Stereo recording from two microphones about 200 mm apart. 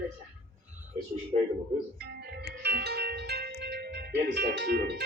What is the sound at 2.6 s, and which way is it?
Music, 55° right (ahead or behind).